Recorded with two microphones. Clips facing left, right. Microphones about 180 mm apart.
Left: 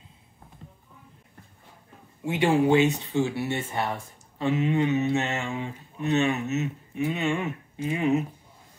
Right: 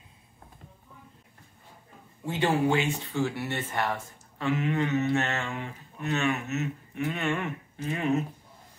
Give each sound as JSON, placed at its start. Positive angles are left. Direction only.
{"t": 2.2, "sound": "speech", "side_deg": 15}